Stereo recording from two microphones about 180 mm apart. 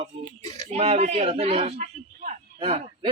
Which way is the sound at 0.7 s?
35° right (ahead or behind).